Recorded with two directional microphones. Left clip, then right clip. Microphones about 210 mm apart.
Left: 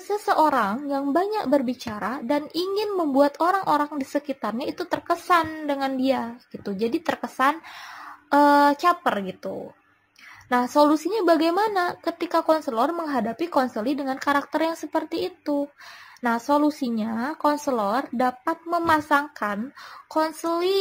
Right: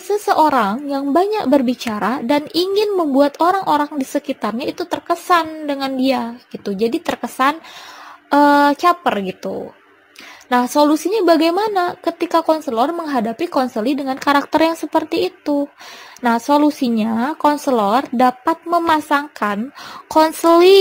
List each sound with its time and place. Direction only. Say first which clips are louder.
0.1 s speech: right 6 dB; 35° right (ahead or behind)